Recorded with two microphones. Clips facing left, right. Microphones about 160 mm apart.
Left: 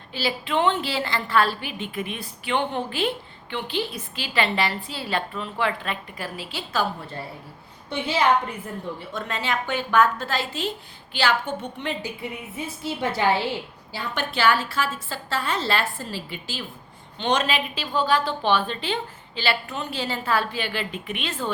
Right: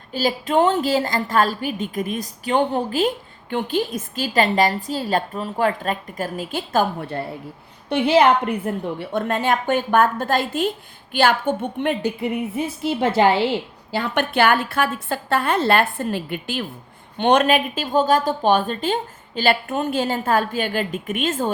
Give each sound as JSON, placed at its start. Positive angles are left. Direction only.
{"t": 0.1, "sound": "a woman's voice", "side_deg": -45}
{"t": 7.9, "sound": "a woman's voice", "side_deg": -65}